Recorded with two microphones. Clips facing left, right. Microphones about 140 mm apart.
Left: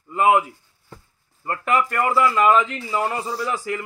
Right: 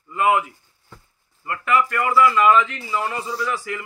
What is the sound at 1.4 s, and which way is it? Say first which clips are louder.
A man's voice: right 1 dB; 35° left (ahead or behind).